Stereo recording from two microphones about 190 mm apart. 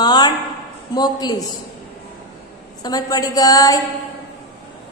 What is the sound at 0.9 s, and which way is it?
Mantra, 20° left (ahead or behind).